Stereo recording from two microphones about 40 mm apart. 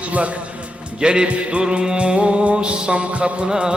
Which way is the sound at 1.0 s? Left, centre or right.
Right.